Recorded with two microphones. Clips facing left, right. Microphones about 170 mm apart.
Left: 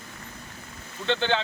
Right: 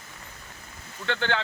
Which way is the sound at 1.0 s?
20° left (ahead or behind).